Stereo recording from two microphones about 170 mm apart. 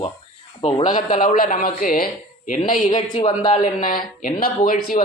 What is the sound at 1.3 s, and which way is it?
Speech, 55° left (ahead or behind).